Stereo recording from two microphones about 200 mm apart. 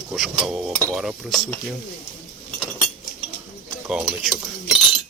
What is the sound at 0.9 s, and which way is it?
Cutlery, centre (ahead or behind).